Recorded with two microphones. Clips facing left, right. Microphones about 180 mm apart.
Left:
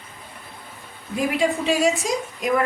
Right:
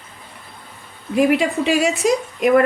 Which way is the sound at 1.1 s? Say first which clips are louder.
Right 6 dB; 70° right (ahead or behind).